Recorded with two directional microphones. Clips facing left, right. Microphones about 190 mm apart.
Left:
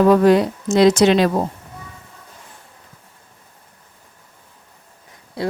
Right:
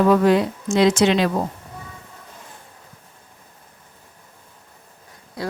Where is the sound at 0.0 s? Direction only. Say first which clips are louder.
Left 3 dB; 40° left (ahead or behind).